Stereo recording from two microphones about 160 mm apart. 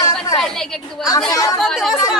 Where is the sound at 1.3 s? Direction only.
20° left (ahead or behind).